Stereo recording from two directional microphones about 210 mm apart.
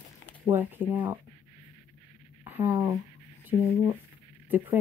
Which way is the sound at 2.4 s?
10° right (ahead or behind).